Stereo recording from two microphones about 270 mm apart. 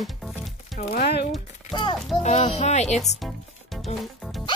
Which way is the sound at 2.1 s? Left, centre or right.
Left.